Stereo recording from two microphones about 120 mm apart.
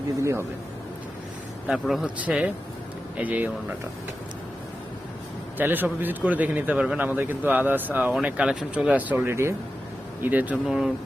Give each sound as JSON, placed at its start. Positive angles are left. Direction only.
{"t": 0.2, "sound": "a man's voice", "side_deg": -25}
{"t": 1.6, "sound": "speech", "side_deg": 0}
{"t": 2.1, "sound": "speech", "side_deg": -10}
{"t": 5.5, "sound": "speech", "side_deg": -15}
{"t": 10.7, "sound": "speech", "side_deg": -5}